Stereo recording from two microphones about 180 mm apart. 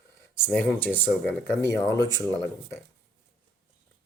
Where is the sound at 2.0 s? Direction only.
20° right (ahead or behind).